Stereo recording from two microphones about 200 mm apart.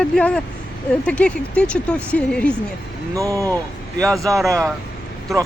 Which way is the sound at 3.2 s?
15° right (ahead or behind).